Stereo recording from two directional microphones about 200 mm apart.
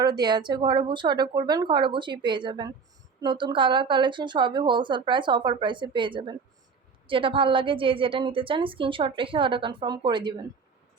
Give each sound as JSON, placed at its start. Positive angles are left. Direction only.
{"t": 0.0, "sound": "a woman's voice", "side_deg": -20}